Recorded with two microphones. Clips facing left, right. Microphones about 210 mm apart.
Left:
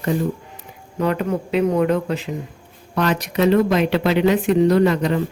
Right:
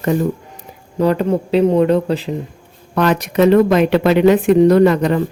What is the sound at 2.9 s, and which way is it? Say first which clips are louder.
Speech: right 5 dB; 55° right (ahead or behind).